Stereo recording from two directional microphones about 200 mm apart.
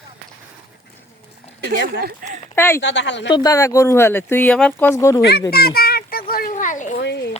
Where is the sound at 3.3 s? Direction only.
20° left (ahead or behind).